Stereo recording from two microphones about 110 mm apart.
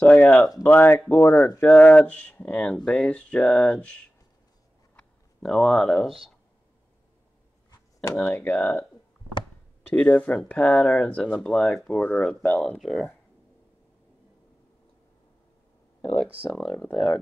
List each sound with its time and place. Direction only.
0.0 s speech: 15° left (ahead or behind)
4.9 s a sound: 5° left (ahead or behind)
8.1 s speech: 10° left (ahead or behind)
9.8 s speech: 10° left (ahead or behind)
12.7 s speech: 5° left (ahead or behind)
16.9 s speech: 5° left (ahead or behind)